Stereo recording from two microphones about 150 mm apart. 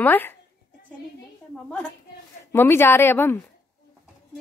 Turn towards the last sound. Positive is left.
turn(degrees=15)  # may be behind; listen again after turning